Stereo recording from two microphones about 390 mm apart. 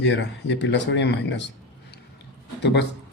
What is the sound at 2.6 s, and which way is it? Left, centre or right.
Speech, left.